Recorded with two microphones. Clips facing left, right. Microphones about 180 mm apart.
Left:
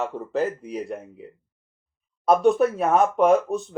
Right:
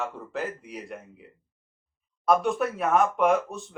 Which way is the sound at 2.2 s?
25° left (ahead or behind).